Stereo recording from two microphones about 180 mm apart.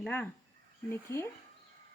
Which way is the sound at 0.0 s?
5° left (ahead or behind).